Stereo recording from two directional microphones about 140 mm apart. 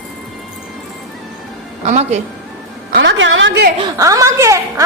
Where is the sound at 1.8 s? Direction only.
55° right (ahead or behind).